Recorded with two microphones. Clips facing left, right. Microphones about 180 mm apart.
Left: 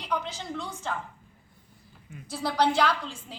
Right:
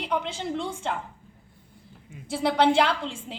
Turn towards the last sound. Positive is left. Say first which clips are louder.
# right 1 dB
turn(degrees=-25)  # may be behind; listen again after turning